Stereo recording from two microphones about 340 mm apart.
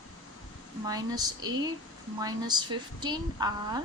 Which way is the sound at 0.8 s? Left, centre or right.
Centre.